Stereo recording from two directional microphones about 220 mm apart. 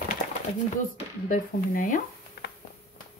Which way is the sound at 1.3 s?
35° left (ahead or behind).